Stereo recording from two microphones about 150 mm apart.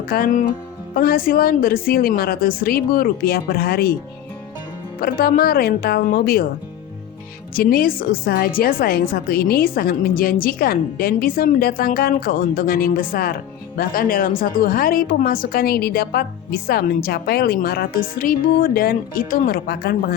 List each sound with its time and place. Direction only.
0.1 s a woman's voice: 70° left (ahead or behind); by 3.9 s 90° left
4.9 s a woman's voice: 90° left
7.5 s a woman's voice: 80° left
19.5 s speech: 85° left